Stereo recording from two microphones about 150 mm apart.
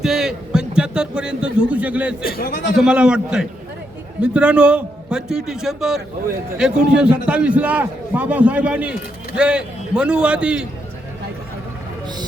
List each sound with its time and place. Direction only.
0.0 s a man's voice: 5° right (ahead or behind)
2.2 s a man's voice: 90° left
2.7 s a man's voice: 5° right (ahead or behind)